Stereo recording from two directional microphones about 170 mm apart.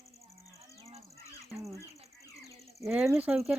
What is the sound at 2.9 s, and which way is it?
Speech, 10° right (ahead or behind).